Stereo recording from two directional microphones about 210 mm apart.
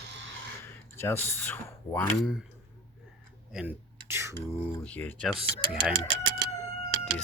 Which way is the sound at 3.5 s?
5° right (ahead or behind).